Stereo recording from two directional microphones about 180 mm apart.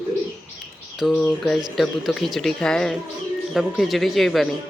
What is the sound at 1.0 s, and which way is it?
Speech, 5° left (ahead or behind).